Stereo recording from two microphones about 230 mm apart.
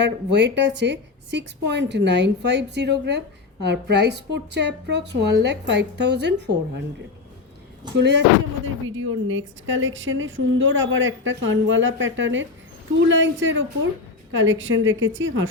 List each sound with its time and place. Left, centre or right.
0.0 s a woman's voice: right
7.9 s a woman's voice: right
9.0 s a woman's voice: right